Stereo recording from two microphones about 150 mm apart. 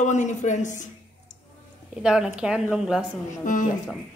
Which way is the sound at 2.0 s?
5° right (ahead or behind).